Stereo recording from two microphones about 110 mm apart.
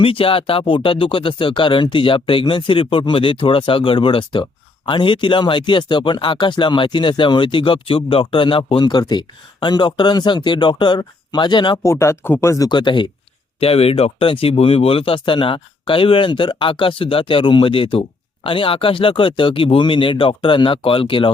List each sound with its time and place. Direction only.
0.0 s speech: 55° left (ahead or behind)
11.8 s speech: 25° left (ahead or behind)
12.6 s speech: 45° left (ahead or behind)
13.6 s speech: 65° left (ahead or behind)